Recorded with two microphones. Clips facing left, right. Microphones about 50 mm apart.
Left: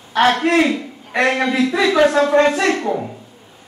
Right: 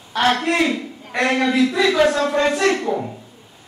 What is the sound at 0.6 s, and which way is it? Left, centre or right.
Speech, centre.